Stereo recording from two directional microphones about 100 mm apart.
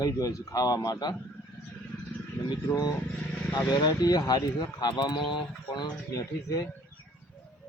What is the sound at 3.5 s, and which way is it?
Speech, 40° left (ahead or behind).